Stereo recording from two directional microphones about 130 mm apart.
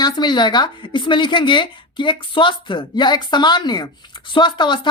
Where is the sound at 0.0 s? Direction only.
35° left (ahead or behind).